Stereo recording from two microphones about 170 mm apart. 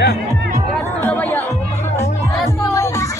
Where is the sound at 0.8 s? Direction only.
10° left (ahead or behind).